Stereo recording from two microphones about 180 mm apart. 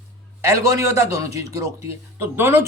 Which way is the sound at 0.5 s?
15° right (ahead or behind).